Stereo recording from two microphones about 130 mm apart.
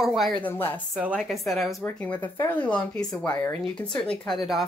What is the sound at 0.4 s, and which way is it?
Speech, 15° left (ahead or behind).